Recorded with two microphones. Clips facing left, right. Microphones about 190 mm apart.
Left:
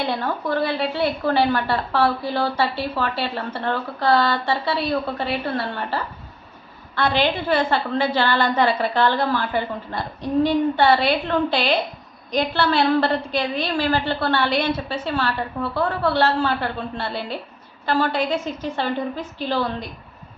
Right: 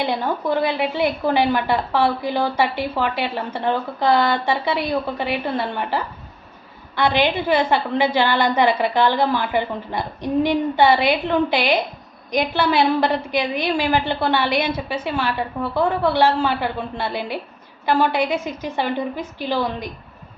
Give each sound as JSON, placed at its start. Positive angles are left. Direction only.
{"t": 0.0, "sound": "a woman's voice", "side_deg": -15}